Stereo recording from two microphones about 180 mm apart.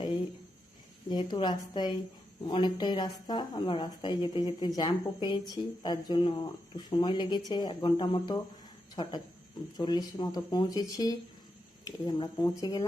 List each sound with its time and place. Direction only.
1.1 s a woman's voice: 25° left (ahead or behind)